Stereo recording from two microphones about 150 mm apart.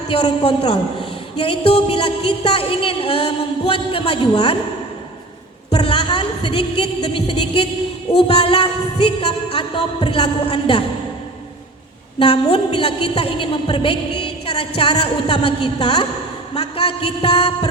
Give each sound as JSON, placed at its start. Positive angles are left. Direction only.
{"t": 0.1, "sound": "a woman's voice", "side_deg": 40}
{"t": 5.7, "sound": "a woman's voice", "side_deg": 35}
{"t": 12.2, "sound": "a woman's voice", "side_deg": 40}